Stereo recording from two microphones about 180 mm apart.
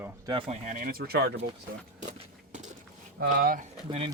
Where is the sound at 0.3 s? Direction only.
30° right (ahead or behind).